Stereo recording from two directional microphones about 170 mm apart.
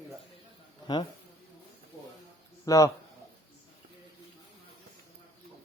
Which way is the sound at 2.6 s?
20° left (ahead or behind).